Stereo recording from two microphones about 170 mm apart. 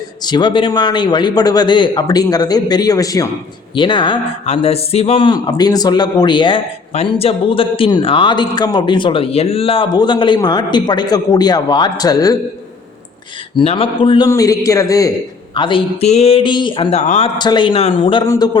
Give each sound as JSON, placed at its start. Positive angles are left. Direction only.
{"t": 0.3, "sound": "speech", "side_deg": 25}
{"t": 13.6, "sound": "speech", "side_deg": 35}
{"t": 14.3, "sound": "speech", "side_deg": 20}
{"t": 15.5, "sound": "speech", "side_deg": 30}
{"t": 17.0, "sound": "speech", "side_deg": 45}
{"t": 17.3, "sound": "speech", "side_deg": 25}